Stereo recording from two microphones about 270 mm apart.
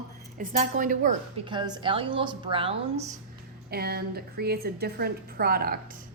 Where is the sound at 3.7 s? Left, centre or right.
Right.